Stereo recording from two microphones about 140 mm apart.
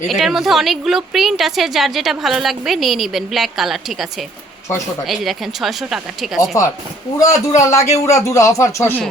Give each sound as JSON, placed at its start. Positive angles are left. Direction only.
{"t": 0.1, "sound": "a woman's voice", "side_deg": 0}
{"t": 5.0, "sound": "a woman's voice", "side_deg": 0}
{"t": 7.2, "sound": "speech", "side_deg": 25}